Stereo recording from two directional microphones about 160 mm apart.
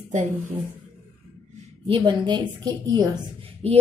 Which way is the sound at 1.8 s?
30° right (ahead or behind).